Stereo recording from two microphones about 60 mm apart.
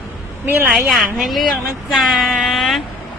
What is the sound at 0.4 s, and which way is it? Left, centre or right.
Speech, right.